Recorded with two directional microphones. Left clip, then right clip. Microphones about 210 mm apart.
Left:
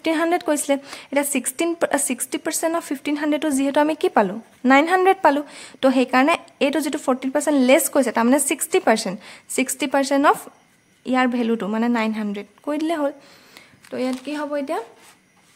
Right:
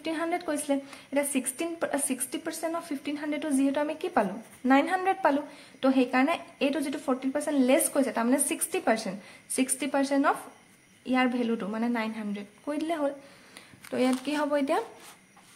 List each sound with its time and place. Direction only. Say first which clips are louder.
0.0 s speech: left 10 dB; 40° left (ahead or behind)
14.1 s speech: left 2 dB; 10° left (ahead or behind)